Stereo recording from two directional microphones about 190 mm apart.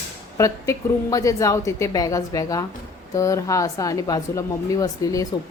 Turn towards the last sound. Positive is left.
turn(degrees=15)  # may be behind; listen again after turning